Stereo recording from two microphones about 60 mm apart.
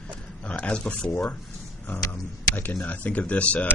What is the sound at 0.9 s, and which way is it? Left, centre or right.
Speech, centre.